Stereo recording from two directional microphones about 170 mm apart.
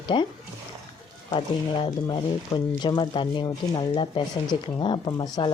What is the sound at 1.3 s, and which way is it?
Speech, 30° left (ahead or behind).